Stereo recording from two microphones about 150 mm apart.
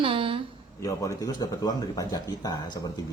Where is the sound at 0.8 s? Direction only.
20° left (ahead or behind).